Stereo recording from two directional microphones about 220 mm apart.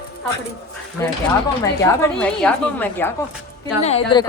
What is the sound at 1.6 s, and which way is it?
A woman's voice, 10° left (ahead or behind).